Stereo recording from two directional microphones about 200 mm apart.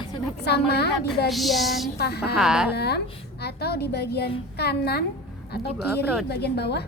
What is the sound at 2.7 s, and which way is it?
A woman's voice, 55° left (ahead or behind).